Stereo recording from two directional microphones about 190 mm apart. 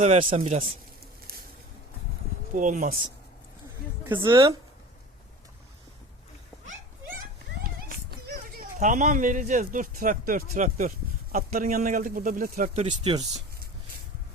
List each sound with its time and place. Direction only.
0.0 s a man's voice: 35° right (ahead or behind)
2.6 s a man's voice: 40° right (ahead or behind)
4.0 s a woman's voice: 10° right (ahead or behind)
7.9 s a child's voice: 50° right (ahead or behind)
12.9 s speech: 25° right (ahead or behind)